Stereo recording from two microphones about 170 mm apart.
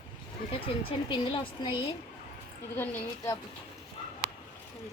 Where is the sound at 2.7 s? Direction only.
15° left (ahead or behind).